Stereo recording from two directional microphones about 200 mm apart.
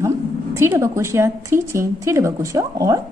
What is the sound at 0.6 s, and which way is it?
A woman's voice, 15° right (ahead or behind).